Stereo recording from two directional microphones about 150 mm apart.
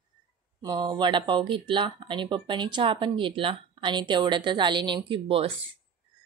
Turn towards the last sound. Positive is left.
turn(degrees=-40)  # may be behind; listen again after turning